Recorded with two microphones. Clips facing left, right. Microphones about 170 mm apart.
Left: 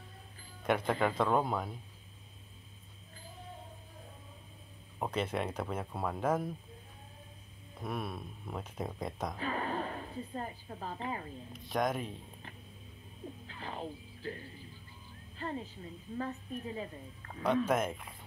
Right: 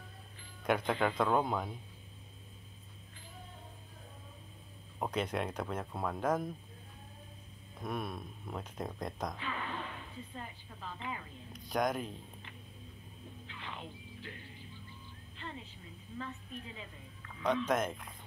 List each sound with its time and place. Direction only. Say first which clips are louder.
0.7 s speech: left 1 dB; 5° left (ahead or behind)
4.9 s speech: left 1 dB; centre (ahead or behind)
7.8 s speech: even; 5° left (ahead or behind)
9.4 s speech: left 5 dB; 40° left (ahead or behind)
11.5 s speech: even; centre (ahead or behind)
13.5 s a woman's voice: left 5 dB; 40° left (ahead or behind)
17.6 s speech: left 1 dB; 5° left (ahead or behind)